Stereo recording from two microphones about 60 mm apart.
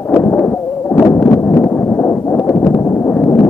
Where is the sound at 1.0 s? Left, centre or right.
Left.